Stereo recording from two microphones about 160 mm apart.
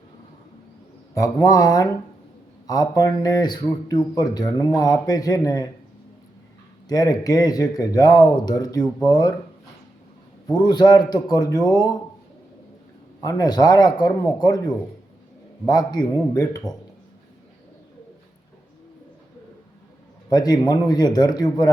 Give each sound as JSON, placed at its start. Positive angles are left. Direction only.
{"t": 1.1, "sound": "speech", "side_deg": 20}
{"t": 6.8, "sound": "speech", "side_deg": 25}
{"t": 10.5, "sound": "speech", "side_deg": 25}
{"t": 13.2, "sound": "speech", "side_deg": 25}
{"t": 20.3, "sound": "speech", "side_deg": 25}